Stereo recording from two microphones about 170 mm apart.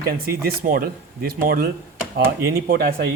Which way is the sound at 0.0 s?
60° right (ahead or behind).